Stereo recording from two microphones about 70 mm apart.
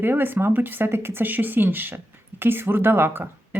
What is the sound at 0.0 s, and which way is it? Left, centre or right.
Speech, right.